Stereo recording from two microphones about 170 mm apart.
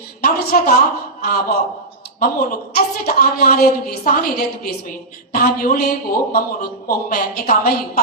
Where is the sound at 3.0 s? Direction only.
65° left (ahead or behind).